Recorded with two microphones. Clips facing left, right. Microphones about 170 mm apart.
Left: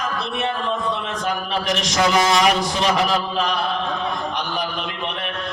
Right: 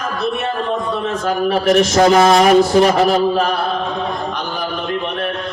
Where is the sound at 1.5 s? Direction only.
50° right (ahead or behind).